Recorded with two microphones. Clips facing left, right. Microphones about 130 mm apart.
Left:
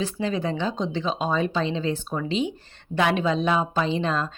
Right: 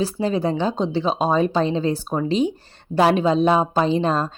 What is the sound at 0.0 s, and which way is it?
Speech, 35° right (ahead or behind).